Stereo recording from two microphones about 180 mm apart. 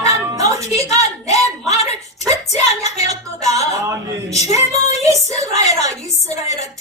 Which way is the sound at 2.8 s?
40° left (ahead or behind).